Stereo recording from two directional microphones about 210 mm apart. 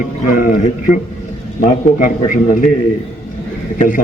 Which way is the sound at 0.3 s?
40° left (ahead or behind).